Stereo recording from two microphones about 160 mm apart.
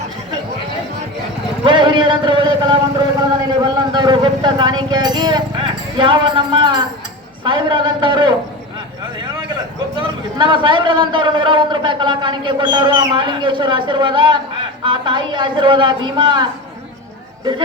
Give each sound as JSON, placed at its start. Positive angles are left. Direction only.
{"t": 1.6, "sound": "a sound", "side_deg": -30}
{"t": 3.6, "sound": "a man's voice", "side_deg": -30}
{"t": 10.3, "sound": "a man's voice", "side_deg": -30}